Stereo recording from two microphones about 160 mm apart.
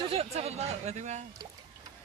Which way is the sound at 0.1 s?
40° right (ahead or behind).